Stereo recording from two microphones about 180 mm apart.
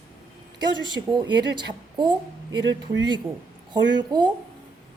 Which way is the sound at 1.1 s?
25° right (ahead or behind).